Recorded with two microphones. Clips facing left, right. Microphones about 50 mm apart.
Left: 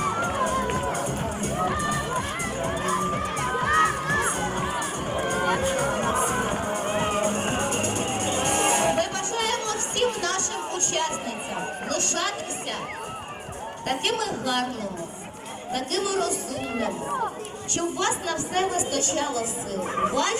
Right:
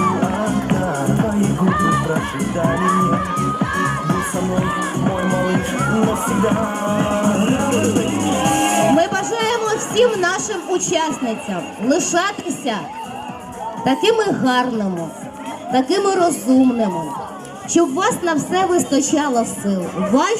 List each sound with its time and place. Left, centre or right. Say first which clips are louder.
0.2 s music: right 5 dB; right
11.9 s a woman's voice: right 13 dB; right
13.8 s a woman's voice: right 11 dB; right
17.7 s a woman's voice: right 11 dB; right